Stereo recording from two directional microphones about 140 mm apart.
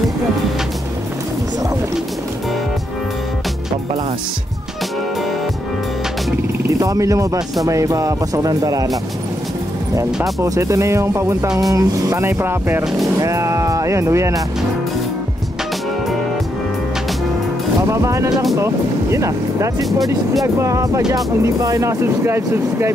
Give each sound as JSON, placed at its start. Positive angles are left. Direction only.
{"t": 6.8, "sound": "speech", "side_deg": -25}
{"t": 10.4, "sound": "speech", "side_deg": -25}
{"t": 17.8, "sound": "speech", "side_deg": -20}
{"t": 18.3, "sound": "speech", "side_deg": 0}
{"t": 18.6, "sound": "speech", "side_deg": -20}